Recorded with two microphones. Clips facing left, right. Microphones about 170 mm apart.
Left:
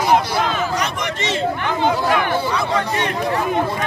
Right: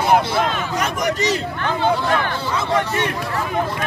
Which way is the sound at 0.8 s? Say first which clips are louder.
Right 3 dB; 40° right (ahead or behind).